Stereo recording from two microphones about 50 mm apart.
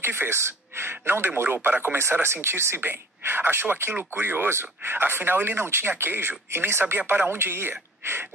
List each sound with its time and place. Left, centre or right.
0.0 s speech: right
7.0 s speech: right
7.2 s speech: right